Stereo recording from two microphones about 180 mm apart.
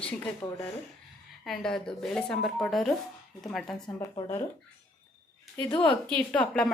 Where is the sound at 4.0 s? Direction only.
15° left (ahead or behind).